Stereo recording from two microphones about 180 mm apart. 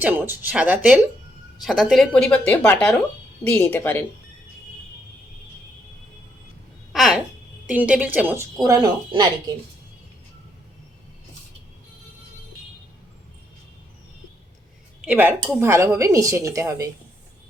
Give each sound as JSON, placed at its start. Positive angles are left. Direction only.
{"t": 0.0, "sound": "speech", "side_deg": -10}
{"t": 6.9, "sound": "a sound", "side_deg": 0}
{"t": 7.7, "sound": "speech", "side_deg": -5}
{"t": 15.0, "sound": "speech", "side_deg": -10}